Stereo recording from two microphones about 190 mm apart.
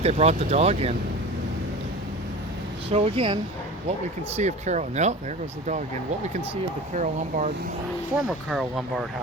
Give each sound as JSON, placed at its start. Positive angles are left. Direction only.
{"t": 0.0, "sound": "speech", "side_deg": -35}
{"t": 2.9, "sound": "speech", "side_deg": -30}
{"t": 4.4, "sound": "speech", "side_deg": -35}
{"t": 6.9, "sound": "speech", "side_deg": -40}
{"t": 8.1, "sound": "speech", "side_deg": 0}